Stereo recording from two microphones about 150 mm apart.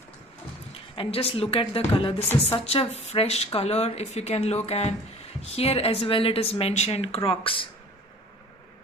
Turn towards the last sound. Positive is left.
turn(degrees=35)  # may be behind; listen again after turning